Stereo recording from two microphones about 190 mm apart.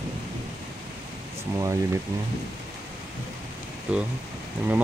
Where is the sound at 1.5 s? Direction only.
15° right (ahead or behind).